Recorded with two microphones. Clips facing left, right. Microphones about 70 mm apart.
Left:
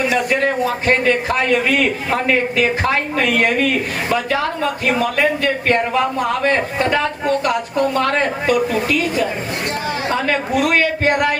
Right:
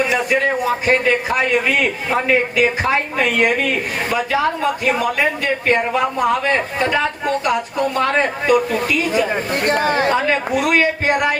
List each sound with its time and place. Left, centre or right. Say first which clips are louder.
2.6 s a woman's voice: even; centre
9.6 s speech: right 6 dB; right
10.2 s a woman's voice: even; centre